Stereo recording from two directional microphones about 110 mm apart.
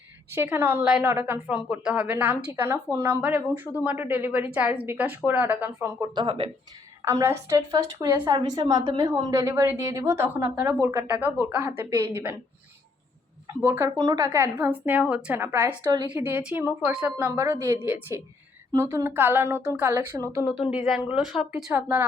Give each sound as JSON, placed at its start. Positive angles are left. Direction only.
{"t": 0.3, "sound": "a woman's voice", "side_deg": -20}
{"t": 6.1, "sound": "speech", "side_deg": -50}
{"t": 7.0, "sound": "a woman's voice", "side_deg": -25}
{"t": 8.3, "sound": "a woman's voice", "side_deg": -35}
{"t": 13.5, "sound": "a woman's voice", "side_deg": -25}
{"t": 14.0, "sound": "a woman's voice", "side_deg": -35}
{"t": 15.8, "sound": "a woman's voice", "side_deg": -35}
{"t": 16.1, "sound": "a woman's voice", "side_deg": -20}
{"t": 20.6, "sound": "speech", "side_deg": -10}
{"t": 21.7, "sound": "a woman's voice", "side_deg": -15}